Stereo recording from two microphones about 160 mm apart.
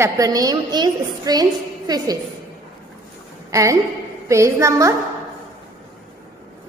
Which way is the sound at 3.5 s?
20° right (ahead or behind).